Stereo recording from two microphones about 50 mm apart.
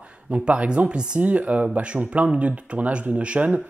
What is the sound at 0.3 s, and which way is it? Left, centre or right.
Speech, right.